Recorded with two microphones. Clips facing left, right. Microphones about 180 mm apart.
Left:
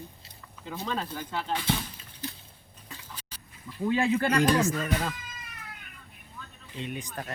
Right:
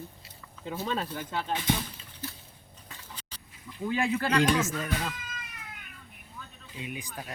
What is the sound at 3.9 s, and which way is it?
Speech, 35° left (ahead or behind).